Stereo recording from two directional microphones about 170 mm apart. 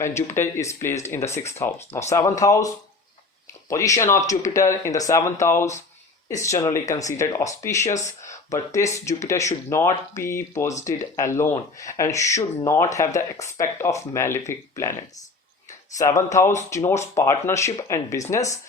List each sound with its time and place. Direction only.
0.0 s speech: 15° left (ahead or behind)
16.0 s speech: 20° left (ahead or behind)